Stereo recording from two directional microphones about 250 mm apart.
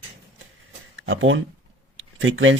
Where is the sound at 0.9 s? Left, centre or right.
Right.